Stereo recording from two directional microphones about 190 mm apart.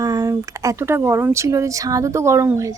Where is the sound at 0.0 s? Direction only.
20° right (ahead or behind).